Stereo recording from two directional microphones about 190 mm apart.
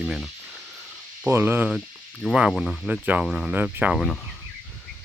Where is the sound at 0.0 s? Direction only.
Centre (ahead or behind).